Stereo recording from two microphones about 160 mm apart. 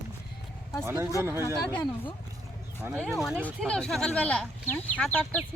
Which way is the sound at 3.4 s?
5° left (ahead or behind).